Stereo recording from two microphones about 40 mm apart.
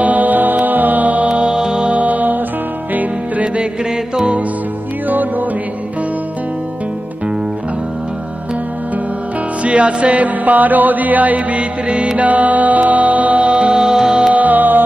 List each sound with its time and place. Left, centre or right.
0.0 s music: right
1.3 s music: centre
1.9 s music: right
5.0 s music: right
9.6 s music: right; by 14.3 s centre
14.3 s music: right